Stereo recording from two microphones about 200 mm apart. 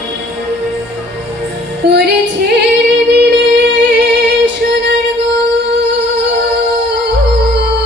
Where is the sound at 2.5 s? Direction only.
60° right (ahead or behind).